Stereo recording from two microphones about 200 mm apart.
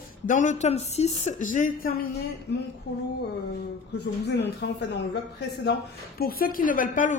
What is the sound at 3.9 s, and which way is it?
A woman's voice, 55° left (ahead or behind).